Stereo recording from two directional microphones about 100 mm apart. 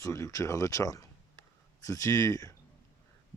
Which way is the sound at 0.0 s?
30° left (ahead or behind).